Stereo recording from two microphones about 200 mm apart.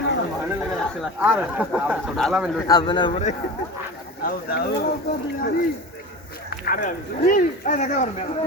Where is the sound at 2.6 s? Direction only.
20° left (ahead or behind).